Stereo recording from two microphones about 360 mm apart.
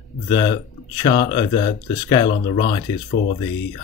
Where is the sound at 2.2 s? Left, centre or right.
Left.